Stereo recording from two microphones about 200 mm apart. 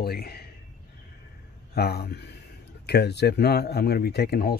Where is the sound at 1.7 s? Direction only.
50° left (ahead or behind).